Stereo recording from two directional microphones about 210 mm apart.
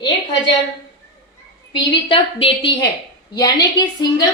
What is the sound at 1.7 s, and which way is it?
A woman's voice, 25° left (ahead or behind).